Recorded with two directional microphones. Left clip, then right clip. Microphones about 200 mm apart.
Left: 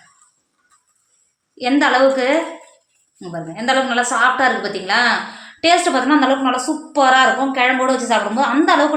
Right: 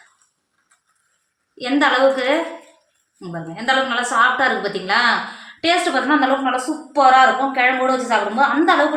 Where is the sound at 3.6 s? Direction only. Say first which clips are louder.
Left 2 dB; 35° left (ahead or behind).